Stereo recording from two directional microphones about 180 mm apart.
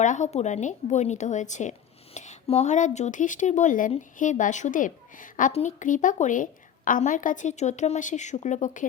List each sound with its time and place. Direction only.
0.0 s a woman's voice: 40° left (ahead or behind)